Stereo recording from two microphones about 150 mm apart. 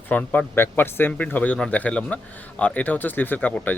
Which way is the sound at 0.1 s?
10° left (ahead or behind).